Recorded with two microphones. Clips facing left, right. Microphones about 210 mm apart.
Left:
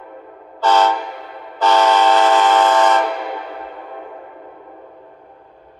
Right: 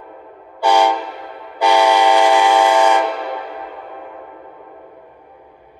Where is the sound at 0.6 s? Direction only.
15° right (ahead or behind).